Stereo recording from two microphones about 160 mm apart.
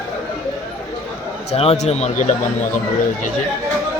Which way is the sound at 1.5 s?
40° left (ahead or behind).